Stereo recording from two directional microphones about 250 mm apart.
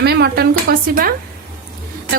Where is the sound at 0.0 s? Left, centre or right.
Right.